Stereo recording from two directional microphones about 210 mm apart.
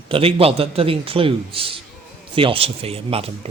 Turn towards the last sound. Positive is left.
turn(degrees=-25)  # may be behind; listen again after turning